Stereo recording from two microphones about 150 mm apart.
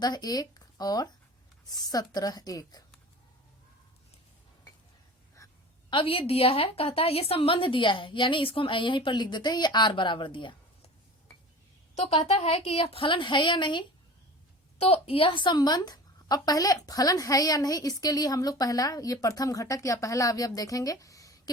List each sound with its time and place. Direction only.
0.0 s a woman's voice: 25° left (ahead or behind)
5.4 s a sound: 20° left (ahead or behind)
5.9 s a woman's voice: 35° left (ahead or behind)
11.9 s a woman's voice: 45° left (ahead or behind); by 21.5 s 25° left (ahead or behind)